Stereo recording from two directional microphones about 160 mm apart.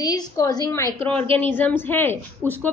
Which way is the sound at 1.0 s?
35° right (ahead or behind).